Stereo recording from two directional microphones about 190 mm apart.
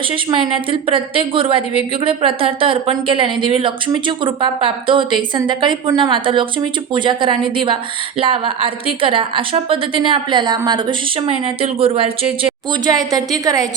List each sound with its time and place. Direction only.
0.1 s speech: 25° right (ahead or behind)